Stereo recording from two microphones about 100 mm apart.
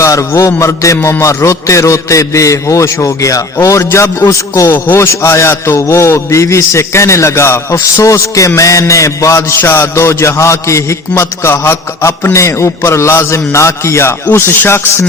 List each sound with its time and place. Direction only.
0.0 s a man's voice: 30° left (ahead or behind)